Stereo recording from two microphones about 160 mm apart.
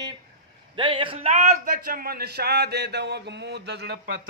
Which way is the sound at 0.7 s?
30° right (ahead or behind).